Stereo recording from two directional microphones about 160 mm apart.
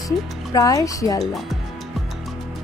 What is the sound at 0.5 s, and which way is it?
Speech, 20° left (ahead or behind).